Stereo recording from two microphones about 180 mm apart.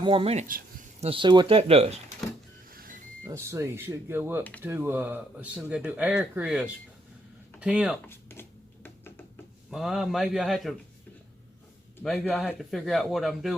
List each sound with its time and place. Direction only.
0.0 s speech: 30° right (ahead or behind)
0.4 s a sound: 50° right (ahead or behind)
1.0 s speech: 30° right (ahead or behind)
2.6 s vehicle: 50° right (ahead or behind)
3.2 s speech: 15° right (ahead or behind)
8.0 s a sound: 15° left (ahead or behind)
9.6 s speech: centre (ahead or behind)
12.0 s speech: 5° left (ahead or behind)